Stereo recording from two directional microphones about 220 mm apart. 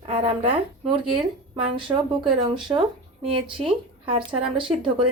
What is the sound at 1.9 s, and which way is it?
Speech, 20° right (ahead or behind).